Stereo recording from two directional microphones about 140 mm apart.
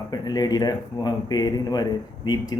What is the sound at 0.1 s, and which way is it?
Speech, 30° left (ahead or behind).